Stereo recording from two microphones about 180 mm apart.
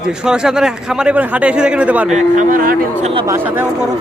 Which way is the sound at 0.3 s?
5° right (ahead or behind).